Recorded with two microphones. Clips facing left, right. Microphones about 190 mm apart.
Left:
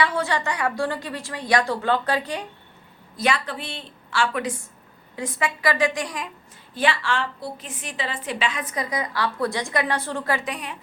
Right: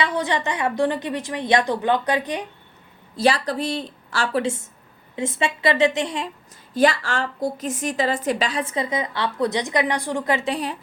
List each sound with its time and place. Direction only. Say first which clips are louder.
0.0 s a woman's voice: right 1 dB; 20° right (ahead or behind)
3.2 s a woman's voice: right 5 dB; 35° right (ahead or behind)
6.7 s a woman's voice: right 4 dB; 40° right (ahead or behind)